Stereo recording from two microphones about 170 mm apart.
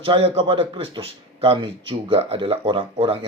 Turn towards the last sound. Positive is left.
turn(degrees=-30)  # may be behind; listen again after turning